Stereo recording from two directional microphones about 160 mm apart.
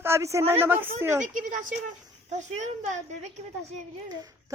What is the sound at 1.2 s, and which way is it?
A woman's voice, 55° right (ahead or behind).